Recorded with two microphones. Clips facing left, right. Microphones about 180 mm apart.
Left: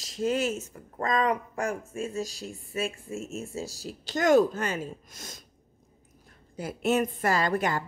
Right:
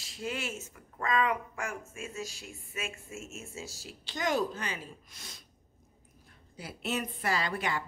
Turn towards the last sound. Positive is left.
turn(degrees=45)  # may be behind; listen again after turning